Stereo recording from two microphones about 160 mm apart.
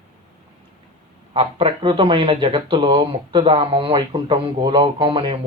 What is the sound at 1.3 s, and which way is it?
Speech, 35° right (ahead or behind).